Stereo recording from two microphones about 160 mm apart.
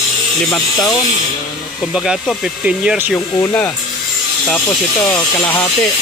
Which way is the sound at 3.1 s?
15° left (ahead or behind).